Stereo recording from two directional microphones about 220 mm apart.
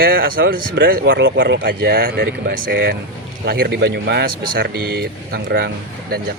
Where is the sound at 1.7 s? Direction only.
45° right (ahead or behind).